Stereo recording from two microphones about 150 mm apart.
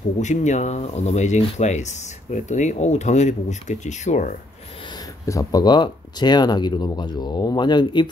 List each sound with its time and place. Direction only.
0.2 s speech: 50° left (ahead or behind)
5.2 s speech: 20° left (ahead or behind)